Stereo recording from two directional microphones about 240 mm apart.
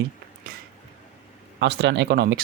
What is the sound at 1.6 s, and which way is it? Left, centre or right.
Speech, right.